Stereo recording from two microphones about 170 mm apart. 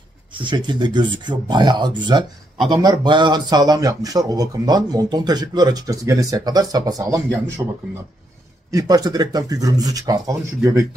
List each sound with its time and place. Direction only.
0.4 s speech: 25° right (ahead or behind)